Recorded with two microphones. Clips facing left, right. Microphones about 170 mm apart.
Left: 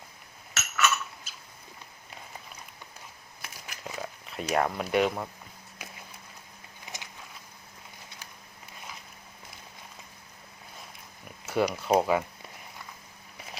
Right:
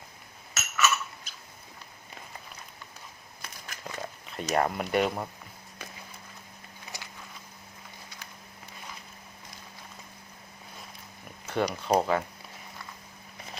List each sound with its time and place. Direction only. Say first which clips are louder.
0.5 s chink: even; centre (ahead or behind)
3.4 s a sound: even; 5° left (ahead or behind)
11.4 s speech: left 1 dB; 5° left (ahead or behind)